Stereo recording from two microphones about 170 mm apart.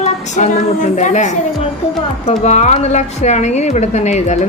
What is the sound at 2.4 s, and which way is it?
Speech, 40° left (ahead or behind).